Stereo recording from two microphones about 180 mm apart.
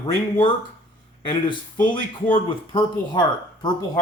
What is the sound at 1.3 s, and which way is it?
Speech, 25° left (ahead or behind).